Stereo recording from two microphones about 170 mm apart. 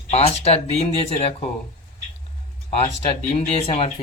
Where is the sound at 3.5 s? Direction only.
35° left (ahead or behind).